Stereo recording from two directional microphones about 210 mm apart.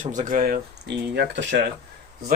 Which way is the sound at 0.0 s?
35° right (ahead or behind).